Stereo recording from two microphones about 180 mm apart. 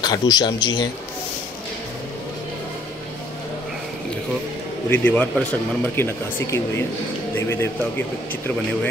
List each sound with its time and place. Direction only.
0.0 s speech: 20° left (ahead or behind)
4.8 s speech: 10° left (ahead or behind)